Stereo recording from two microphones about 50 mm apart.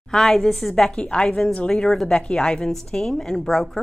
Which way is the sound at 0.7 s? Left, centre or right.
Centre.